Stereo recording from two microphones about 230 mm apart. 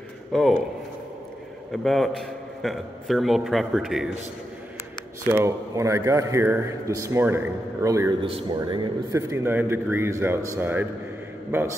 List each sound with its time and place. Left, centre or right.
0.3 s speech: centre
1.7 s a man's voice: centre
5.2 s speech: centre